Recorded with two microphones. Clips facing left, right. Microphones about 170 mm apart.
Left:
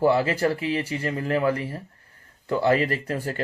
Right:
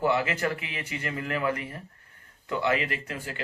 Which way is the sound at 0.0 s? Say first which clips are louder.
Left 5 dB; 35° left (ahead or behind).